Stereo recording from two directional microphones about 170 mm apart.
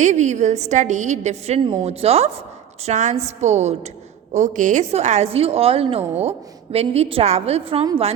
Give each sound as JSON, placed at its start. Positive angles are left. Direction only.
{"t": 0.0, "sound": "a woman's voice", "side_deg": -45}